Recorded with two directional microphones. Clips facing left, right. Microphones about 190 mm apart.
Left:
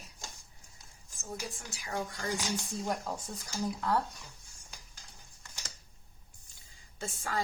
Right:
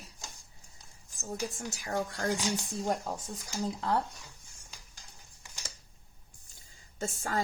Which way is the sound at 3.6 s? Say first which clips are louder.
Even; 25° right (ahead or behind).